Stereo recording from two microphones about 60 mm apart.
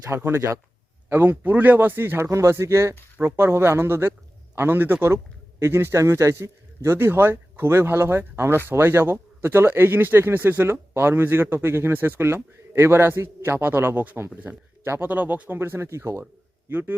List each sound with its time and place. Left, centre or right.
0.0 s speech: right
1.1 s a man's voice: right
14.8 s speech: right
15.1 s speech: right
15.5 s a man's voice: right
16.6 s speech: right